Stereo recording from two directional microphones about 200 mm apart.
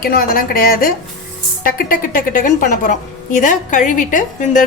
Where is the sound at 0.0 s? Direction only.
45° left (ahead or behind).